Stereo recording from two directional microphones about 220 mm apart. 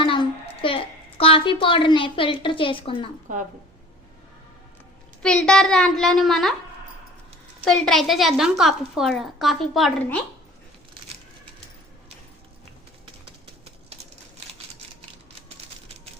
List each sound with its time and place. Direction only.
0.0 s a sound: 25° left (ahead or behind)
5.2 s a woman's voice: 5° left (ahead or behind)
7.6 s a woman's voice: centre (ahead or behind)